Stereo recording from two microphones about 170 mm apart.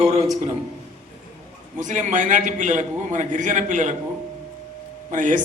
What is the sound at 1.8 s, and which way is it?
A man's voice, 45° right (ahead or behind).